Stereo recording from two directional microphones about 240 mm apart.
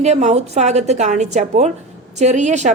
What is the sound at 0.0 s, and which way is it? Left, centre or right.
A woman's voice, right.